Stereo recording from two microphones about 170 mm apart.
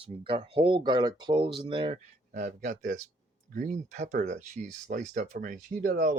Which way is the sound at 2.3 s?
50° right (ahead or behind).